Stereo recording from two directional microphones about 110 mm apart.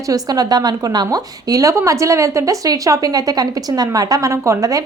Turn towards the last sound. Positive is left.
turn(degrees=-30)  # may be behind; listen again after turning